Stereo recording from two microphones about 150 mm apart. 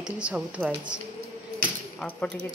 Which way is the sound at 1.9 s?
10° left (ahead or behind).